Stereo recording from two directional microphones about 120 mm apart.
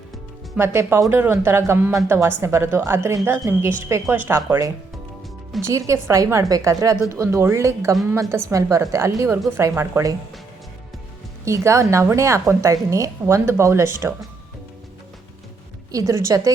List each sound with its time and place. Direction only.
0.5 s a woman's voice: 20° right (ahead or behind)
5.6 s a woman's voice: 25° right (ahead or behind)
11.4 s a woman's voice: 25° right (ahead or behind)
15.9 s a woman's voice: 30° right (ahead or behind)